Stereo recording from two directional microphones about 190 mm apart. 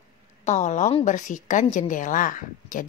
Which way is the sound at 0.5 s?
40° left (ahead or behind).